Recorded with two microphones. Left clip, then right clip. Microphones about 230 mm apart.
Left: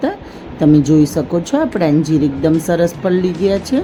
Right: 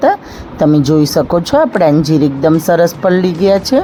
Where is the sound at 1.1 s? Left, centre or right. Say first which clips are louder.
Right 6 dB; centre.